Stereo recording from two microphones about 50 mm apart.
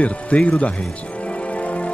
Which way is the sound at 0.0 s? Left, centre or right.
Left.